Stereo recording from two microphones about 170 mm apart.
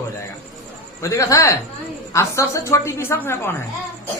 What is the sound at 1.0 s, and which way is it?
A man's voice, 20° left (ahead or behind).